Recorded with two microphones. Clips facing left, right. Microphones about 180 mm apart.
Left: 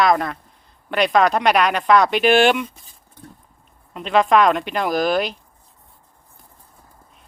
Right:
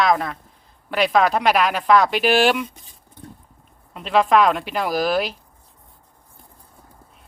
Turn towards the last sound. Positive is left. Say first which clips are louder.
# left 1 dB
turn(degrees=-5)  # may be behind; listen again after turning